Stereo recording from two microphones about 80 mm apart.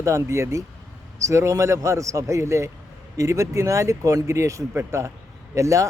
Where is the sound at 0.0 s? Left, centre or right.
Right.